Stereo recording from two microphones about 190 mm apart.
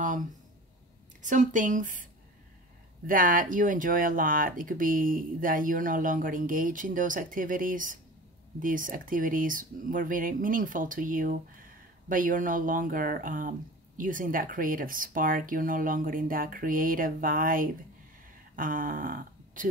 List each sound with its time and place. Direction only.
1.2 s speech: 40° right (ahead or behind)
3.1 s speech: 45° right (ahead or behind)